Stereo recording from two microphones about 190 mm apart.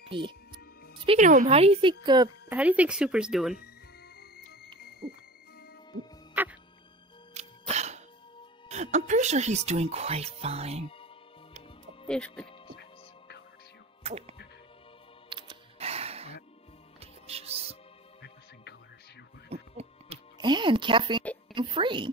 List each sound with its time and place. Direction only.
0.1 s music: 25° right (ahead or behind)
1.0 s speech: 35° right (ahead or behind)
2.5 s speech: 10° right (ahead or behind)
4.2 s music: 55° left (ahead or behind)
6.4 s music: 10° right (ahead or behind)
7.3 s music: 35° right (ahead or behind)
8.6 s speech: 35° right (ahead or behind)
12.1 s speech: 5° left (ahead or behind)
14.0 s speech: 35° right (ahead or behind)
15.2 s music: 25° right (ahead or behind)
18.2 s music: 60° left (ahead or behind)
19.5 s music: 30° right (ahead or behind)
21.5 s a child's voice: 25° right (ahead or behind)